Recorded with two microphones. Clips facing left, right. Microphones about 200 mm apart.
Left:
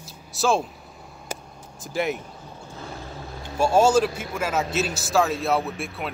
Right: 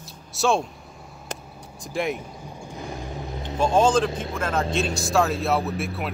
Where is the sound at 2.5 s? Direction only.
15° right (ahead or behind).